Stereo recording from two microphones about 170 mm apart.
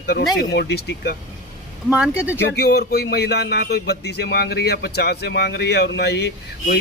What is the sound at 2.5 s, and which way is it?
Speech, 70° left (ahead or behind).